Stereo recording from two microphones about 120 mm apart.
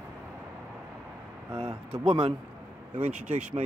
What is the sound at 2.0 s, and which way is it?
Speech, 50° right (ahead or behind).